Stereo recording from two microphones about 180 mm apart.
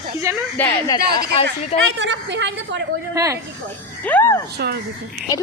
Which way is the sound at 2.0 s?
80° right.